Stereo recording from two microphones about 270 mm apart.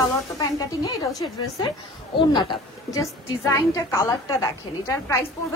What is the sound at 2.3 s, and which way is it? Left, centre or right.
A woman's voice, centre.